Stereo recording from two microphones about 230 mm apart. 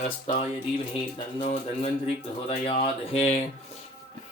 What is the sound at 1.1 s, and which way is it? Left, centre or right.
Speech, left.